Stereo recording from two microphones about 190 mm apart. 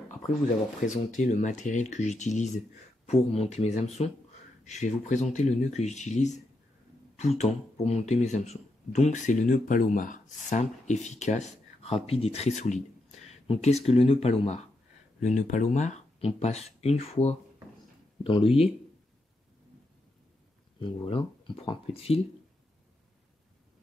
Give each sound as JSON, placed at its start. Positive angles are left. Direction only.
{"t": 0.8, "sound": "speech", "side_deg": 40}
{"t": 20.8, "sound": "speech", "side_deg": 30}